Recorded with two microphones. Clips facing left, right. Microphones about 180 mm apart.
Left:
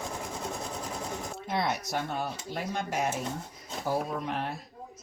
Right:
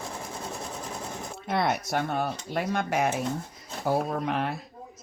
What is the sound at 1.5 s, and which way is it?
Speech, 60° right (ahead or behind).